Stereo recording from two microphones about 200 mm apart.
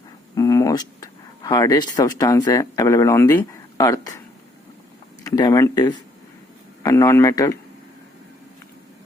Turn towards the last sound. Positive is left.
turn(degrees=15)  # may be behind; listen again after turning